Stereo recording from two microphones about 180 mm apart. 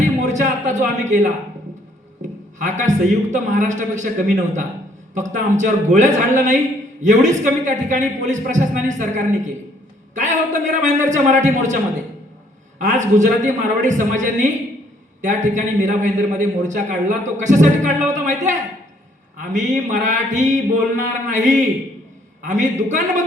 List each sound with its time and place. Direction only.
0.2 s a sound: 40° right (ahead or behind)
2.6 s a man's voice: 40° right (ahead or behind)
12.8 s a man's voice: 45° right (ahead or behind)